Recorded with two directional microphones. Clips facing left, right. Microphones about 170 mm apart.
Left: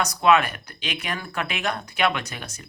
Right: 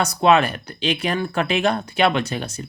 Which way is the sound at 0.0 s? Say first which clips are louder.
Right 3 dB; 30° right (ahead or behind).